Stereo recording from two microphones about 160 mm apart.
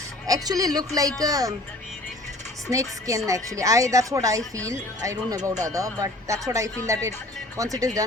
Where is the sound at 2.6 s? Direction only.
20° right (ahead or behind).